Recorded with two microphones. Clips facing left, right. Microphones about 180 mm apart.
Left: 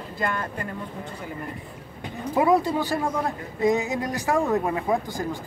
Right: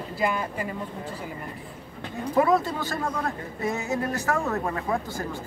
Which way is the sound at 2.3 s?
15° left (ahead or behind).